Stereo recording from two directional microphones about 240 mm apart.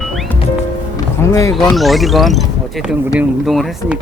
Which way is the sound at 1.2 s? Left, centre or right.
Centre.